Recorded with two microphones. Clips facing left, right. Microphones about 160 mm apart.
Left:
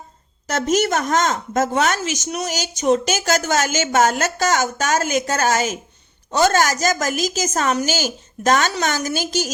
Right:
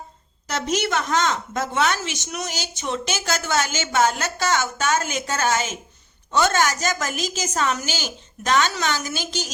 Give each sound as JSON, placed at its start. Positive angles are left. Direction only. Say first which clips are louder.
{"t": 0.4, "sound": "a woman's voice", "louder": "left 5 dB", "side_deg": 45}